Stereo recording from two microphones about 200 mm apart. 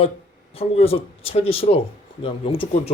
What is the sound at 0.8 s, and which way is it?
Speech, 30° left (ahead or behind).